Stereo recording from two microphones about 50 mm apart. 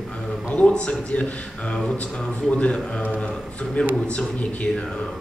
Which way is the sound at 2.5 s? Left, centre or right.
Left.